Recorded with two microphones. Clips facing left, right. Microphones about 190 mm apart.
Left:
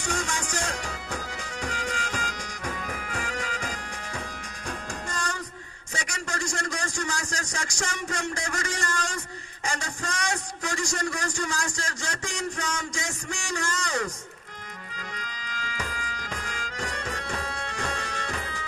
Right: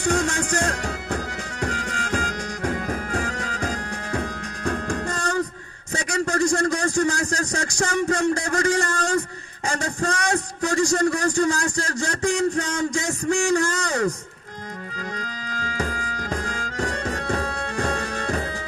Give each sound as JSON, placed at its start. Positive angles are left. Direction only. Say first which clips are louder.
{"t": 0.0, "sound": "music", "louder": "right 8 dB", "side_deg": -55}
{"t": 3.7, "sound": "music", "louder": "right 8 dB", "side_deg": -55}
{"t": 6.1, "sound": "a sound", "louder": "right 13 dB", "side_deg": -55}
{"t": 8.4, "sound": "a man's voice", "louder": "right 10 dB", "side_deg": -55}
{"t": 14.9, "sound": "music", "louder": "right 6 dB", "side_deg": -50}